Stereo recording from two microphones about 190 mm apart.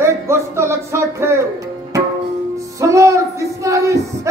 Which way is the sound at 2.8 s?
15° right (ahead or behind).